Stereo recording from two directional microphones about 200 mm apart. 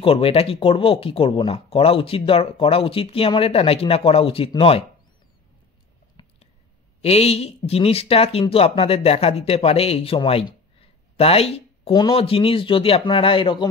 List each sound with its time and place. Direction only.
0.0 s speech: 30° left (ahead or behind)
6.2 s a sound: 20° left (ahead or behind)
7.0 s speech: 30° left (ahead or behind)